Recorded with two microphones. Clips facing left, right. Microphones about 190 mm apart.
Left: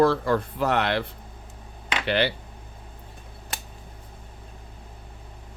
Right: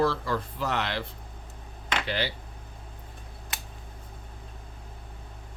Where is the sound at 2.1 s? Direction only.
65° left (ahead or behind).